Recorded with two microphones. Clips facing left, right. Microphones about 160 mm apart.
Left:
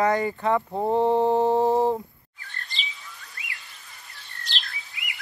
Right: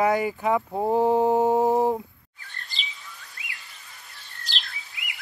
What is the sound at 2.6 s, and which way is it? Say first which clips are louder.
Chirp: left 2 dB; centre (ahead or behind).